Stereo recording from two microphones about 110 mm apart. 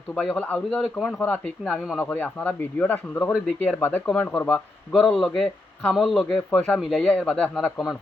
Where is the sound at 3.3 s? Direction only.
Centre (ahead or behind).